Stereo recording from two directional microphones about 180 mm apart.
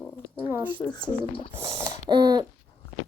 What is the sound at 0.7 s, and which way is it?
Speech, 25° left (ahead or behind).